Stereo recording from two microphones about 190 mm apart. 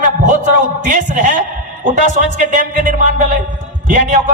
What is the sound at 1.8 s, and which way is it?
A man's voice, 40° right (ahead or behind).